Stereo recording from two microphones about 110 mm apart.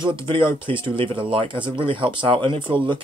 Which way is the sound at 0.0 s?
50° right (ahead or behind).